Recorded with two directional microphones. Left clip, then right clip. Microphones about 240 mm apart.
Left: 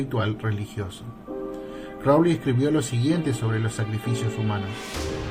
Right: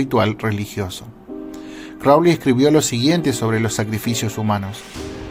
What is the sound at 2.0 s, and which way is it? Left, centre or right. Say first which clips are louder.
Speech: right 7 dB; right.